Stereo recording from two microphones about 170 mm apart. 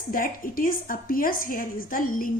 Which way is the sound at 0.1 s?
55° left (ahead or behind).